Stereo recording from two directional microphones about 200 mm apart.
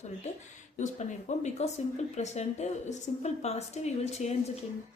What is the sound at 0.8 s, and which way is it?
A woman's voice, 35° left (ahead or behind).